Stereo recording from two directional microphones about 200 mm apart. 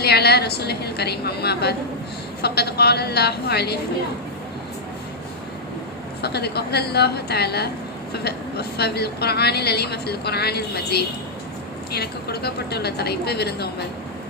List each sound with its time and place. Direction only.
0.0 s a woman's voice: 55° left (ahead or behind)
6.2 s a woman's voice: 55° left (ahead or behind)